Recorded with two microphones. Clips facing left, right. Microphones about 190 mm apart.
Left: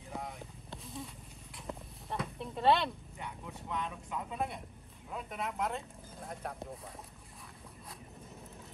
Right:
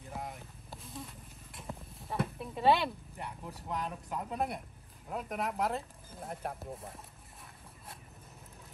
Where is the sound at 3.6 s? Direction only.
40° right (ahead or behind).